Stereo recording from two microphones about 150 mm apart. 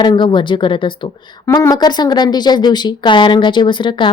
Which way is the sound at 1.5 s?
20° left (ahead or behind).